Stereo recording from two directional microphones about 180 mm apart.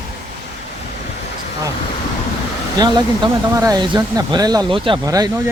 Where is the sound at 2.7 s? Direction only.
25° right (ahead or behind).